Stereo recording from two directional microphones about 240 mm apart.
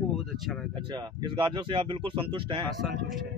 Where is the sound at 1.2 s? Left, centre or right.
Centre.